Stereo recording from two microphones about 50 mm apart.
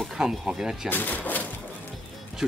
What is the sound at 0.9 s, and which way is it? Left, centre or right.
Speech, left.